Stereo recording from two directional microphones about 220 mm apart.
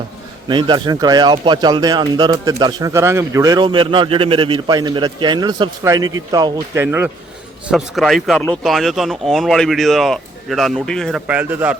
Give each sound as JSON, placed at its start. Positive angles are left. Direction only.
{"t": 0.4, "sound": "speech", "side_deg": -20}
{"t": 7.7, "sound": "speech", "side_deg": 0}